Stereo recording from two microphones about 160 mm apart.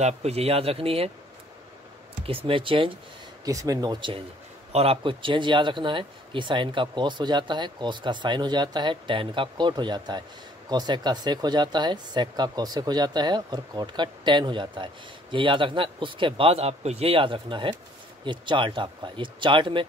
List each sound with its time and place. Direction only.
0.0 s speech: 40° right (ahead or behind)
2.2 s speech: 35° right (ahead or behind)
3.4 s speech: 20° right (ahead or behind)